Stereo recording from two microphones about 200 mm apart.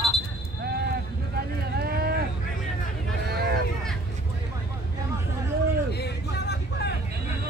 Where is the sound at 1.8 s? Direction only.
50° right (ahead or behind).